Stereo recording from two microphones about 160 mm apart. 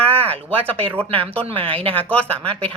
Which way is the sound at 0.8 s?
35° right (ahead or behind).